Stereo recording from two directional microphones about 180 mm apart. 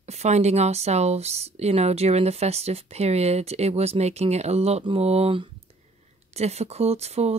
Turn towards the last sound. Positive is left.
turn(degrees=-35)  # may be behind; listen again after turning